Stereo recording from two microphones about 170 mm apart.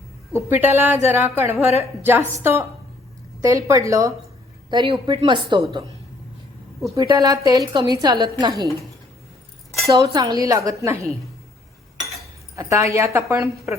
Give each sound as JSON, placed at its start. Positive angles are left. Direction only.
{"t": 0.6, "sound": "a woman's voice", "side_deg": -10}
{"t": 1.6, "sound": "a woman's voice", "side_deg": 40}
{"t": 2.0, "sound": "a woman's voice", "side_deg": -15}
{"t": 6.9, "sound": "a woman's voice", "side_deg": -20}
{"t": 9.9, "sound": "a woman's voice", "side_deg": -25}
{"t": 12.5, "sound": "a woman's voice", "side_deg": -15}